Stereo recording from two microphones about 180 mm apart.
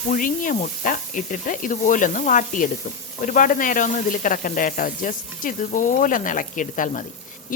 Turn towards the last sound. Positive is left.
turn(degrees=45)  # may be behind; listen again after turning